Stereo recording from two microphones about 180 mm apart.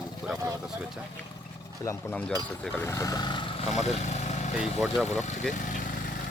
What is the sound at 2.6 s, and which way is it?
Speech, 10° left (ahead or behind).